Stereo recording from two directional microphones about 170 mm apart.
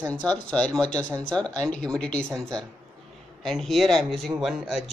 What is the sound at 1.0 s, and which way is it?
Speech, 30° right (ahead or behind).